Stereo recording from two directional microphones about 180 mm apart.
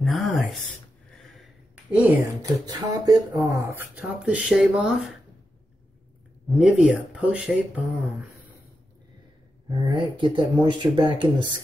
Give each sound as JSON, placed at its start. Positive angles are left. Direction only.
{"t": 0.0, "sound": "speech", "side_deg": 0}
{"t": 1.4, "sound": "a sound", "side_deg": -5}
{"t": 2.4, "sound": "speech", "side_deg": -20}
{"t": 6.5, "sound": "speech", "side_deg": 0}
{"t": 9.8, "sound": "speech", "side_deg": -25}